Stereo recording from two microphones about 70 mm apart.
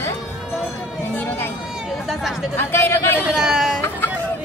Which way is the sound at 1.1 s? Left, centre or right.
Left.